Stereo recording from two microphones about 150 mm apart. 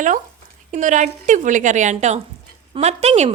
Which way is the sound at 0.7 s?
55° right (ahead or behind).